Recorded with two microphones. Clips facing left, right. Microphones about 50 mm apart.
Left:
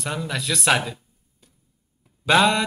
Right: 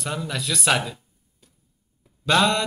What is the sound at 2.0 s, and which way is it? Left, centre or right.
Mantra, centre.